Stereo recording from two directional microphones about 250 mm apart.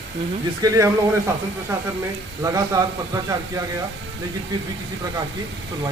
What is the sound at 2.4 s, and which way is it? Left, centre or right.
Speech, centre.